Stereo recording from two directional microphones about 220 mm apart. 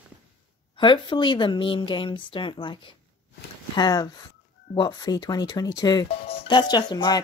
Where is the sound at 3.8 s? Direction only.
15° left (ahead or behind).